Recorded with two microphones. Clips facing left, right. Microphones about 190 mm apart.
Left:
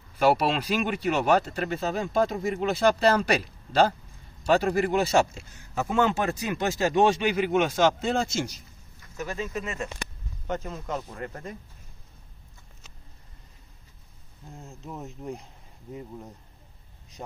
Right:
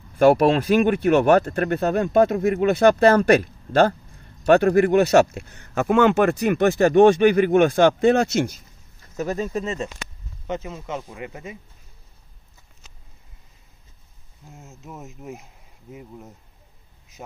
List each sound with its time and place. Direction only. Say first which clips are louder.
0.2 s speech: right 7 dB; 50° right (ahead or behind)
9.1 s speech: right 7 dB; 40° right (ahead or behind)
10.4 s speech: right 2 dB; 5° right (ahead or behind)
14.5 s speech: left 1 dB; centre (ahead or behind)